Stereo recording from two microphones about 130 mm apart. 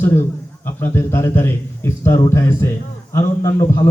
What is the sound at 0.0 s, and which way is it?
A man's voice, 20° left (ahead or behind).